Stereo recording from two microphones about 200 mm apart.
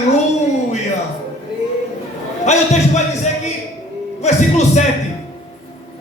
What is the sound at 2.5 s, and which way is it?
Speech, 35° left (ahead or behind).